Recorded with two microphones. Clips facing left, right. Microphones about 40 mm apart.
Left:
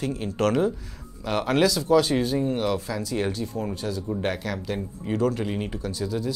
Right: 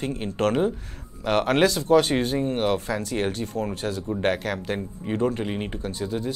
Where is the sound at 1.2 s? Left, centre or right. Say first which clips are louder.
Right 2 dB; right.